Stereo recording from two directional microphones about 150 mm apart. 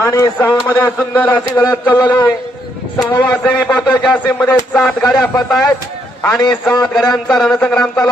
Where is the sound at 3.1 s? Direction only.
10° left (ahead or behind).